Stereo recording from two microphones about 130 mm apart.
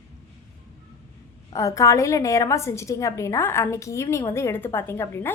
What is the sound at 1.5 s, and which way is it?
A woman's voice, 25° left (ahead or behind).